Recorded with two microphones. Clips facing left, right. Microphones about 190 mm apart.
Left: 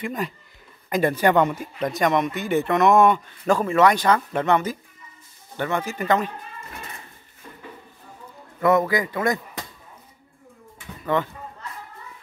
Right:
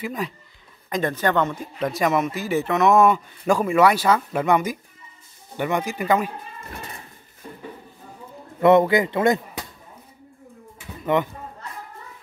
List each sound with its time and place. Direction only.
0.0 s speech: centre (ahead or behind)
8.5 s a man's voice: 25° right (ahead or behind)
11.1 s a man's voice: 20° right (ahead or behind)